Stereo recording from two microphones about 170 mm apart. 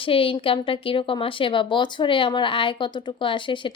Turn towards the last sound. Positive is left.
turn(degrees=30)  # may be behind; listen again after turning